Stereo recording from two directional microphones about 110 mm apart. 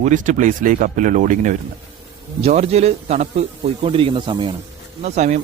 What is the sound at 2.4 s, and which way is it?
Speech, 70° right (ahead or behind).